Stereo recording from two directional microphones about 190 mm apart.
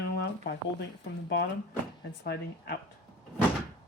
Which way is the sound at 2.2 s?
60° left (ahead or behind).